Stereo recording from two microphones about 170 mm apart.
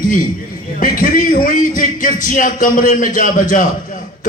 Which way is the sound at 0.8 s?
50° left (ahead or behind).